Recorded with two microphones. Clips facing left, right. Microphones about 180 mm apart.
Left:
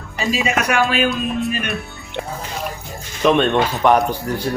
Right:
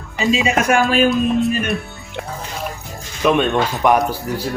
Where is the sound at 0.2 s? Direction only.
25° right (ahead or behind).